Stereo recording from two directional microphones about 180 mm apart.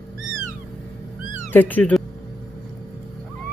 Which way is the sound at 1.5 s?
10° left (ahead or behind).